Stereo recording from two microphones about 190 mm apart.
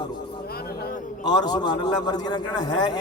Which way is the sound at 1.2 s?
20° left (ahead or behind).